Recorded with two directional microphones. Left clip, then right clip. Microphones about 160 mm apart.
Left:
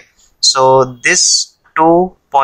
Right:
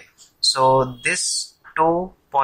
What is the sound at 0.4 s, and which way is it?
Speech, 55° left (ahead or behind).